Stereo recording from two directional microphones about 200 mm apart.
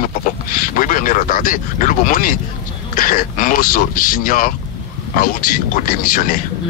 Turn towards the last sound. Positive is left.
turn(degrees=45)  # may be behind; listen again after turning